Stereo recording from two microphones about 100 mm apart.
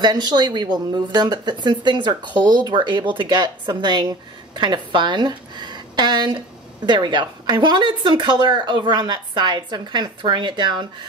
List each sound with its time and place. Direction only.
0.0 s a woman's voice: 45° right (ahead or behind)